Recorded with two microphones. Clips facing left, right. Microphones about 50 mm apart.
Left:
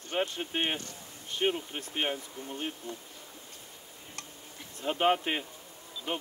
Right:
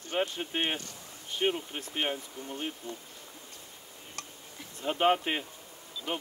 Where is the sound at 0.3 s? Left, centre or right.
Centre.